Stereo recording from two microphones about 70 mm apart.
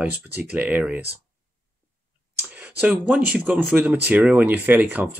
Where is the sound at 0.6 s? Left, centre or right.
Centre.